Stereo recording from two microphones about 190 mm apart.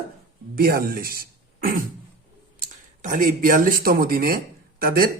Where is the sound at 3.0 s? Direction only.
45° right (ahead or behind).